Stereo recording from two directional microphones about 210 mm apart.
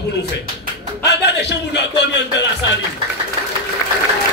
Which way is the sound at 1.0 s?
55° left (ahead or behind).